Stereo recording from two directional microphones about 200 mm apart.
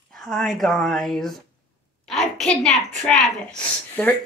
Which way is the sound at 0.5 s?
Centre (ahead or behind).